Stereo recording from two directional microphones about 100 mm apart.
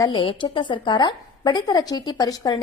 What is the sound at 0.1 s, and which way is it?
A woman's voice, 60° left (ahead or behind).